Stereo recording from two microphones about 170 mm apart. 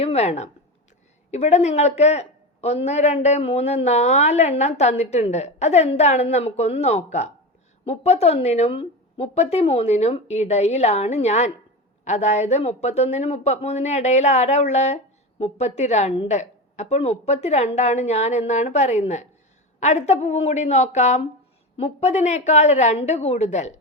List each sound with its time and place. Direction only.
0.0 s speech: 40° left (ahead or behind)